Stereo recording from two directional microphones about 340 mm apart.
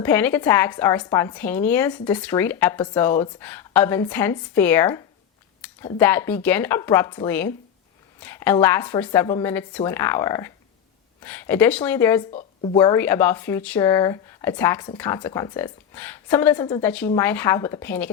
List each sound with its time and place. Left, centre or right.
0.0 s a woman's voice: centre
12.3 s speech: centre
12.7 s speech: centre